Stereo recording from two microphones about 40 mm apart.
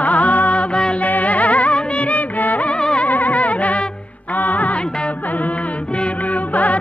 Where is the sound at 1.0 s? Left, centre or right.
Left.